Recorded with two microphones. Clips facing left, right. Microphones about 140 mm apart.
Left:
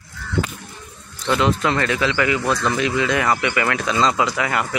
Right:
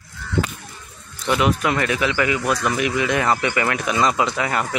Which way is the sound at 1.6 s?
15° right (ahead or behind).